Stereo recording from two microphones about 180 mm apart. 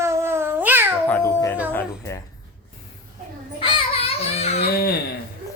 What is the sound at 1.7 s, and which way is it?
Speech, 15° left (ahead or behind).